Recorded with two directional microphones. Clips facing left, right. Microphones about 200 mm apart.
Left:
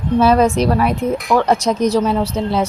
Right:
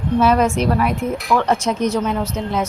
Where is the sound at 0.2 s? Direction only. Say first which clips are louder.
Left 3 dB; 35° left (ahead or behind).